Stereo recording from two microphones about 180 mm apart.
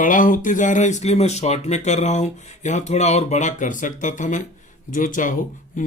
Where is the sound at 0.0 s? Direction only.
45° left (ahead or behind).